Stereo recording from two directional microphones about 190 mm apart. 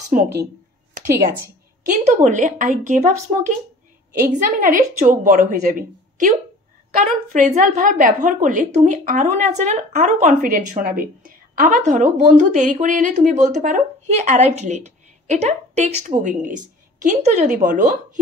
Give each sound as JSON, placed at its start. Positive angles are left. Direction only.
{"t": 0.1, "sound": "a woman's voice", "side_deg": -45}
{"t": 1.9, "sound": "a woman's voice", "side_deg": -40}